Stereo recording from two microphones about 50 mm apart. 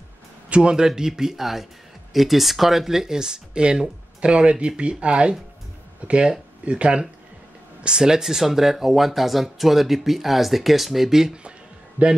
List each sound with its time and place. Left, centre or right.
0.5 s speech: centre